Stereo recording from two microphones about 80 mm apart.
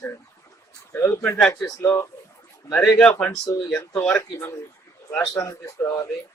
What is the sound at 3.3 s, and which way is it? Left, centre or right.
Speech, left.